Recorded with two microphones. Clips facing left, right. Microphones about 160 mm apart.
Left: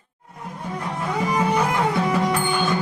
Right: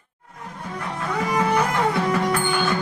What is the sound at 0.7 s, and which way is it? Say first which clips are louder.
Music: left 1 dB; 15° left (ahead or behind).